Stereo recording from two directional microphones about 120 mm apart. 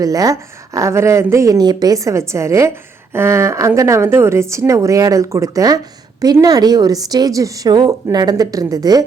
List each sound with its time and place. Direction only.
0.0 s speech: 30° right (ahead or behind)